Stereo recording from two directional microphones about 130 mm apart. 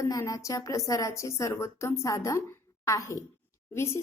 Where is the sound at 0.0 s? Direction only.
25° left (ahead or behind).